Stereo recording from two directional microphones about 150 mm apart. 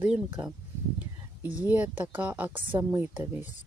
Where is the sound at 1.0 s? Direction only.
10° right (ahead or behind).